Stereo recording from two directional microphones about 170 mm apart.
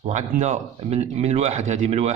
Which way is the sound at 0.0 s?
45° right (ahead or behind).